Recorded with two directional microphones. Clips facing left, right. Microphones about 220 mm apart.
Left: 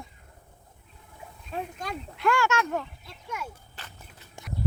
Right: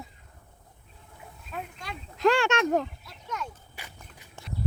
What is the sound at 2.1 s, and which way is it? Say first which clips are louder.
Speech: right 3 dB; 35° right (ahead or behind).